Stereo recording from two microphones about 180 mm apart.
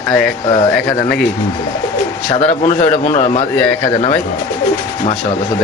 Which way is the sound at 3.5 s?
5° left (ahead or behind).